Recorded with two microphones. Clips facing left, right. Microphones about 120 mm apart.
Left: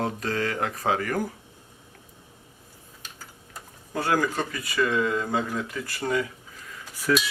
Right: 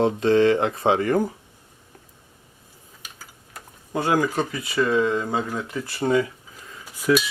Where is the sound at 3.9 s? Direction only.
20° right (ahead or behind).